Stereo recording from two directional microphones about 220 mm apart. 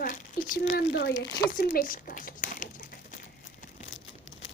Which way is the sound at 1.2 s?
40° left (ahead or behind).